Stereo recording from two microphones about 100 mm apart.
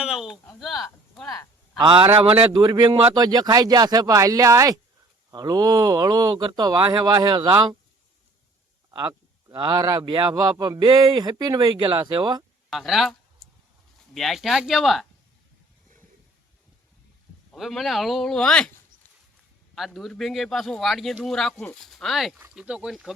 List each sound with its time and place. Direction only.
0.0 s speech: 5° right (ahead or behind)
1.8 s a man's voice: 60° right (ahead or behind)
2.5 s speech: 40° right (ahead or behind)
8.9 s speech: 40° right (ahead or behind)
11.0 s speech: 50° right (ahead or behind)
12.7 s a sound: centre (ahead or behind)
14.1 s speech: centre (ahead or behind)
17.5 s speech: centre (ahead or behind)
19.7 s speech: centre (ahead or behind)
21.8 s speech: centre (ahead or behind)